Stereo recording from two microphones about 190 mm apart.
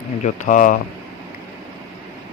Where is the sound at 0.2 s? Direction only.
40° left (ahead or behind).